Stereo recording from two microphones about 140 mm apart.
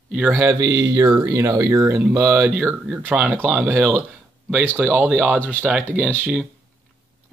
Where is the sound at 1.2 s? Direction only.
20° right (ahead or behind).